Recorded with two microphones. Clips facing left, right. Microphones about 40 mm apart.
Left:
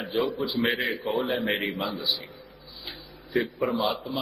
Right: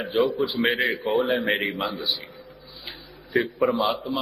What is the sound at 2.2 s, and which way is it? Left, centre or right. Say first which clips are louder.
Music: right 2 dB; centre.